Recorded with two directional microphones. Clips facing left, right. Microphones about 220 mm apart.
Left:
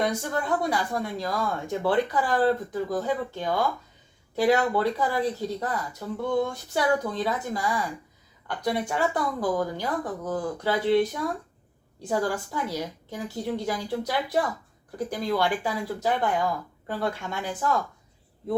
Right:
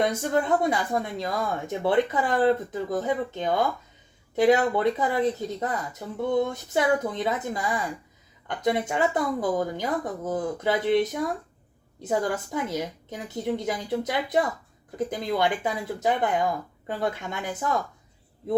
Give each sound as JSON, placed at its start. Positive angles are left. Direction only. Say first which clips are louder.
{"t": 0.0, "sound": "speech", "louder": "right 3 dB", "side_deg": -20}